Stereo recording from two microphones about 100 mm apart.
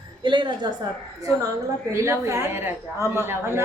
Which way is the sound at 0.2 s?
55° right (ahead or behind).